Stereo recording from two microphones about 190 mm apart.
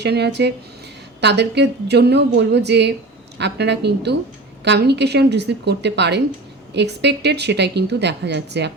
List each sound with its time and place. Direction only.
0.0 s a woman's voice: 60° right (ahead or behind)